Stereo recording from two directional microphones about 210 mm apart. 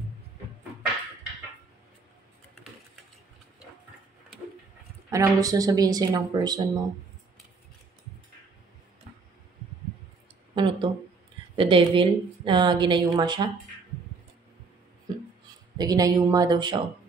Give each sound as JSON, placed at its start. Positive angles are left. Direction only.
{"t": 5.1, "sound": "speech", "side_deg": -15}
{"t": 10.5, "sound": "a sound", "side_deg": -25}
{"t": 11.5, "sound": "a woman's voice", "side_deg": -25}
{"t": 15.8, "sound": "speech", "side_deg": -15}